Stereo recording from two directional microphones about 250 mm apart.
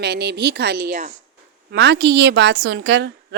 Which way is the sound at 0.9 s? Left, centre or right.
Right.